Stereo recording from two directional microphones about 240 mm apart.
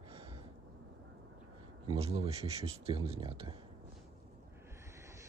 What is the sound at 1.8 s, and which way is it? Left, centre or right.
Speech, right.